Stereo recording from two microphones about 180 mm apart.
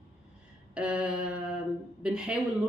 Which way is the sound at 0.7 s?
5° right (ahead or behind).